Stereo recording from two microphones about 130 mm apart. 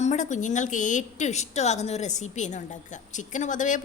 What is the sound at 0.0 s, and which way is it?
A woman's voice, 65° left (ahead or behind).